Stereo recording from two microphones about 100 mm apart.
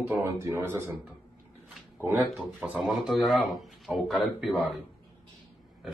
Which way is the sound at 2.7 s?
Centre (ahead or behind).